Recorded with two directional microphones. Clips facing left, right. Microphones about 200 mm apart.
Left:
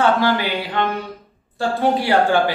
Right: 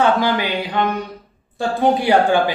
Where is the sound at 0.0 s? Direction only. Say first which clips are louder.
Even; 15° right (ahead or behind).